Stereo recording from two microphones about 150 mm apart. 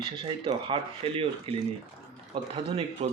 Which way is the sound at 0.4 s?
35° right (ahead or behind).